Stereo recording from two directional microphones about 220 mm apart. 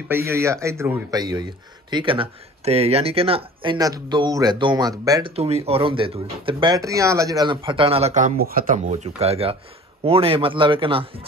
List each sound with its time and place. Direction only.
0.1 s speech: 10° right (ahead or behind)
5.3 s speech: 30° right (ahead or behind)